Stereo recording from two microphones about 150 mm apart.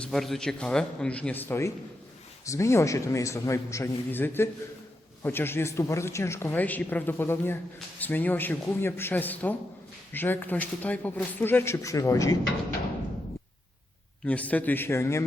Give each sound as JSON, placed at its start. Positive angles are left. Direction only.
{"t": 0.0, "sound": "a man's voice", "side_deg": 0}
{"t": 14.3, "sound": "speech", "side_deg": 10}